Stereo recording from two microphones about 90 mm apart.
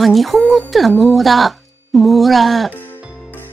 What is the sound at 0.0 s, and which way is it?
Speech, centre (ahead or behind).